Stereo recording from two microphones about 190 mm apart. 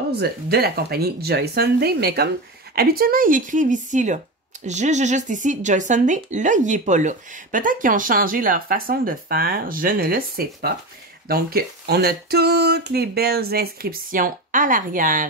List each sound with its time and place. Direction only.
0.1 s speech: 55° right (ahead or behind)